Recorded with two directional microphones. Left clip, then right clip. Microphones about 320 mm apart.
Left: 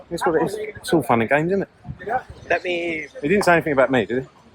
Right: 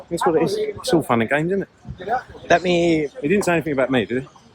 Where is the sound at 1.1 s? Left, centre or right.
Centre.